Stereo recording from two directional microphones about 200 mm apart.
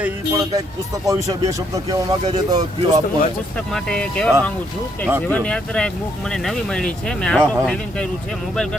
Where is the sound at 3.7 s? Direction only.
5° left (ahead or behind).